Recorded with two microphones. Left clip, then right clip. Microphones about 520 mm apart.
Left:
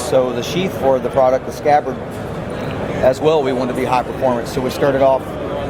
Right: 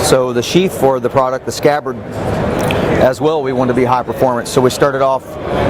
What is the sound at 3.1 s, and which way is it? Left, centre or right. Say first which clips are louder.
Speech: even; right.